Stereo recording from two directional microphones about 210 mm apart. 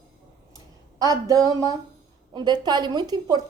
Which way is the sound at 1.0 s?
15° right (ahead or behind).